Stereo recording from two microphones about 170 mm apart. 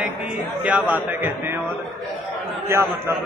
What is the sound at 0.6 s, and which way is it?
Speech, 10° right (ahead or behind).